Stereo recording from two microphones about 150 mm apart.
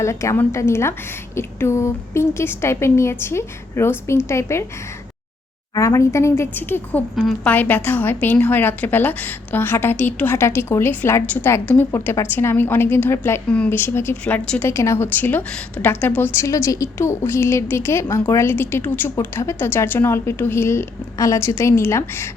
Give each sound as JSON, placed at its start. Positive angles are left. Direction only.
{"t": 0.0, "sound": "a woman's voice", "side_deg": 20}
{"t": 5.7, "sound": "a woman's voice", "side_deg": 20}
{"t": 14.7, "sound": "a woman's voice", "side_deg": 20}